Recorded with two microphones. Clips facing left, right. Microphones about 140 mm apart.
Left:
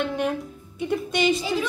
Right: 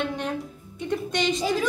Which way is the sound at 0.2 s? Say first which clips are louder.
Left 4 dB; 5° left (ahead or behind).